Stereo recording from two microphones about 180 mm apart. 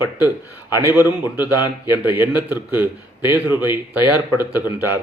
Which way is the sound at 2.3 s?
10° right (ahead or behind).